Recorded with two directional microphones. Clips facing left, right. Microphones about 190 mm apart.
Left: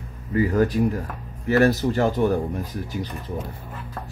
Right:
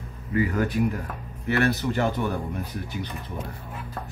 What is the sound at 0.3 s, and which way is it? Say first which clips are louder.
Speech: left 4 dB; 35° left (ahead or behind).